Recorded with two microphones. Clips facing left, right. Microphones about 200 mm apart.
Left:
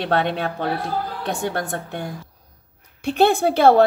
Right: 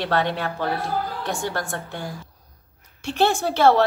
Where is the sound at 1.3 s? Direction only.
60° left (ahead or behind).